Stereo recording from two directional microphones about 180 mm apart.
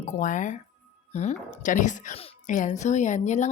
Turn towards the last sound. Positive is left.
turn(degrees=40)  # may be behind; listen again after turning